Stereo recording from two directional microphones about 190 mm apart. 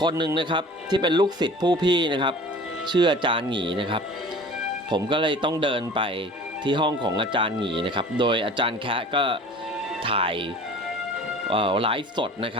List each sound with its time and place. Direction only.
0.0 s speech: 20° right (ahead or behind)
11.4 s speech: 25° right (ahead or behind)